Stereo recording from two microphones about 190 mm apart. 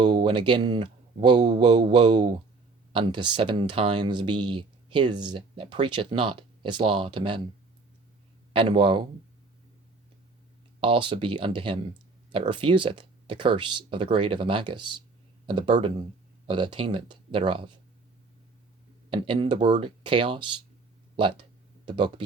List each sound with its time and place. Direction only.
0.0 s speech: 25° right (ahead or behind)
8.5 s speech: 25° right (ahead or behind)
10.8 s speech: 25° right (ahead or behind)
19.1 s speech: 25° right (ahead or behind)